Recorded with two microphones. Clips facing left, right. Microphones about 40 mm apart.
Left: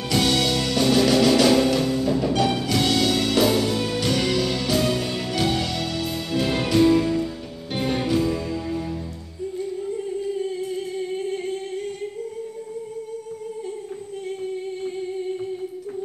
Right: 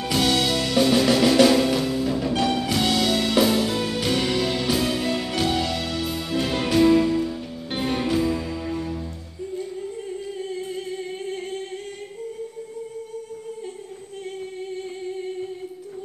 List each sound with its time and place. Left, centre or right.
0.1 s music: centre
10.7 s music: centre